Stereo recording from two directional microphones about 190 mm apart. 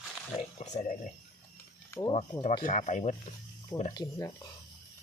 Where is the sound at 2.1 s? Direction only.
35° left (ahead or behind).